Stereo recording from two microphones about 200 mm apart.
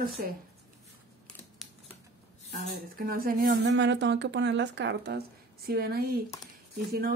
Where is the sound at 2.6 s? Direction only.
45° right (ahead or behind).